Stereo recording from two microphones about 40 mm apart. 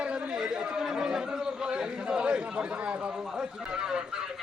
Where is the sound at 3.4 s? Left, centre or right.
Centre.